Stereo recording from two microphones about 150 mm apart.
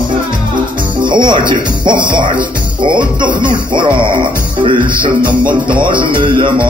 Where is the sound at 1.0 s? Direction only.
30° right (ahead or behind).